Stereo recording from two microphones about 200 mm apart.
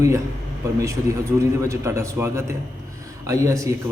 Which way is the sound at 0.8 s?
15° right (ahead or behind).